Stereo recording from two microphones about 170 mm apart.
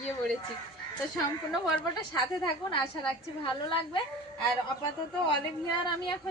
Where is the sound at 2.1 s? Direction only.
25° left (ahead or behind).